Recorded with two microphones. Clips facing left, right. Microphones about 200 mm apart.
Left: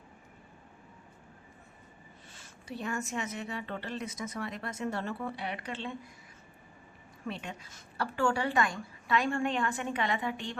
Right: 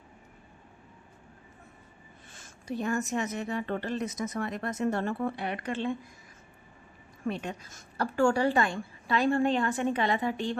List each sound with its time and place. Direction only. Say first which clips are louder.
2.3 s a woman's voice: right 7 dB; 45° right (ahead or behind)
7.3 s a woman's voice: right 6 dB; 45° right (ahead or behind)